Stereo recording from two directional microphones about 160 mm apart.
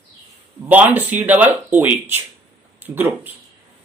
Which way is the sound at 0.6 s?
10° right (ahead or behind).